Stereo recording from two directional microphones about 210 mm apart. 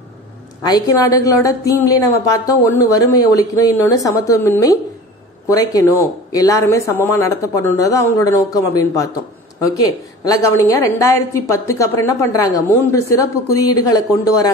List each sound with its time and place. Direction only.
0.6 s a woman's voice: 15° left (ahead or behind)